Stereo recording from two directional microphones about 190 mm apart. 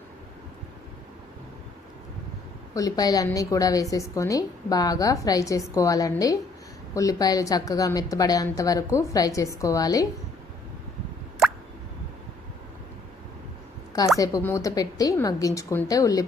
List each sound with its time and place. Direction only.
2.7 s a woman's voice: 20° left (ahead or behind)
14.2 s a woman's voice: 15° left (ahead or behind)